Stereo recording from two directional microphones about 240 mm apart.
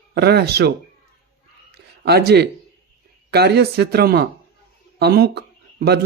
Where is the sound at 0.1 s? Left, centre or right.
Right.